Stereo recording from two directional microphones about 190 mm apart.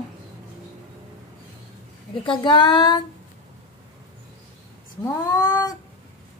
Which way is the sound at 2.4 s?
25° left (ahead or behind).